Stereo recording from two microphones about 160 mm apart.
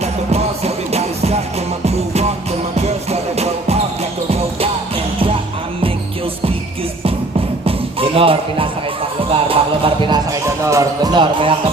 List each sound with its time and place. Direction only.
0.0 s music: 40° right (ahead or behind)
2.8 s music: 40° right (ahead or behind)
7.9 s speech: 35° right (ahead or behind)
9.5 s music: 35° right (ahead or behind)
10.6 s speech: 20° right (ahead or behind)